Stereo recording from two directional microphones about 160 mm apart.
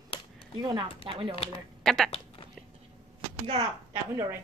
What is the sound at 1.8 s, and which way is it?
Speech, 5° left (ahead or behind).